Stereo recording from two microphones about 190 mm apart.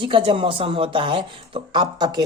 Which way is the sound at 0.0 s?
25° right (ahead or behind).